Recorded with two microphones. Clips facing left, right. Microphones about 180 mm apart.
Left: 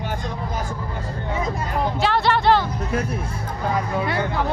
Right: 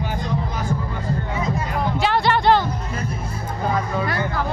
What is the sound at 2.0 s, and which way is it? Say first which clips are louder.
Music: right 1 dB; centre (ahead or behind).